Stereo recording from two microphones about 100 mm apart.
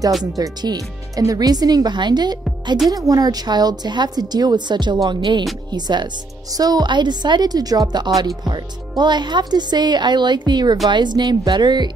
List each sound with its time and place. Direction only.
0.2 s a woman's voice: 45° right (ahead or behind)